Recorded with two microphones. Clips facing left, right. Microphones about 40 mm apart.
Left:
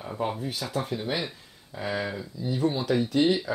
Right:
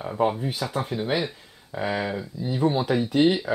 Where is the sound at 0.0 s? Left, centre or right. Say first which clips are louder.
Right 6 dB; centre.